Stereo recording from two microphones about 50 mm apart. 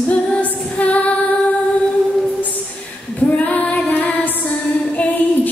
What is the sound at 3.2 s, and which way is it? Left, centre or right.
Female singing, left.